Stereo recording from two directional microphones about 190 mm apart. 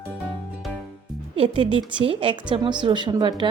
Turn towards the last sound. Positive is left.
turn(degrees=-25)  # may be behind; listen again after turning